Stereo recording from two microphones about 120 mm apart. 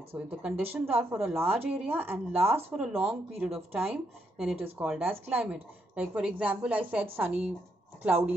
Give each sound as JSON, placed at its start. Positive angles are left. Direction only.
{"t": 0.3, "sound": "a woman's voice", "side_deg": -10}